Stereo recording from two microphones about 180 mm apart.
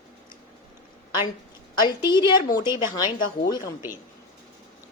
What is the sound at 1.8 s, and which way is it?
A woman's voice, 25° left (ahead or behind).